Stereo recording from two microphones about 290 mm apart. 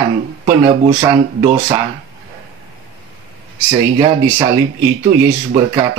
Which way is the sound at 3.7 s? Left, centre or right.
Centre.